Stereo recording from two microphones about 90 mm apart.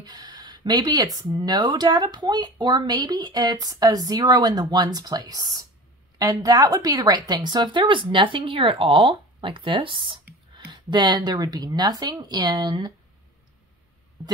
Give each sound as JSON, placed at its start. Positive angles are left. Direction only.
{"t": 0.0, "sound": "speech", "side_deg": -50}